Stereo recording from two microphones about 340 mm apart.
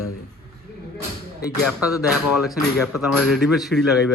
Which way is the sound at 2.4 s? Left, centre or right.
Centre.